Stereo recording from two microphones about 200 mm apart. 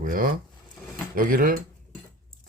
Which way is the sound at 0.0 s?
45° right (ahead or behind).